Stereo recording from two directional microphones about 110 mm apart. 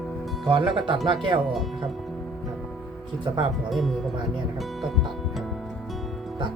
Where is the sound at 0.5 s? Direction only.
50° right (ahead or behind).